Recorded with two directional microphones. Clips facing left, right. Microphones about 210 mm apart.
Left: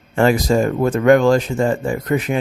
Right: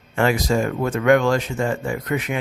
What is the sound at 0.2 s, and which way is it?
Speech, 35° left (ahead or behind).